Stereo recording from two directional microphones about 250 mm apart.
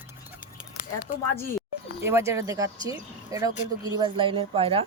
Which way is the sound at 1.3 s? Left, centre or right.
Centre.